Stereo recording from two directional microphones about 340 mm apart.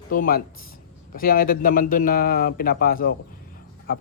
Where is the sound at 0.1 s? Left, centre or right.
Left.